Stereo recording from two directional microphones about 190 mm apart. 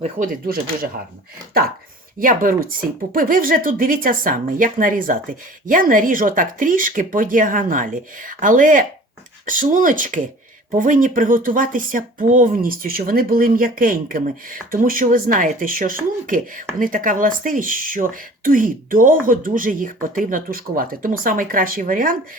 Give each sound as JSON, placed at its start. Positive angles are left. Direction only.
{"t": 0.0, "sound": "speech", "side_deg": -45}
{"t": 2.1, "sound": "speech", "side_deg": -45}